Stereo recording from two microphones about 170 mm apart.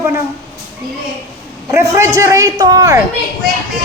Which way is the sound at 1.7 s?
15° right (ahead or behind).